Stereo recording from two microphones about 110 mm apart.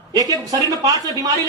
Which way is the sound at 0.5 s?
35° right (ahead or behind).